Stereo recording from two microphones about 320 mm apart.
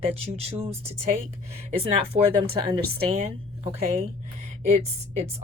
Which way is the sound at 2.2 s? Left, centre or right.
Right.